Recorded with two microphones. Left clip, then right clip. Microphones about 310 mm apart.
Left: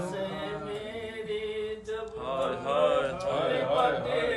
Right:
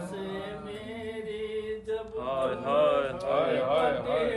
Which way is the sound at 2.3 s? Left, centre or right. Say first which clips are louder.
Right 1 dB; right.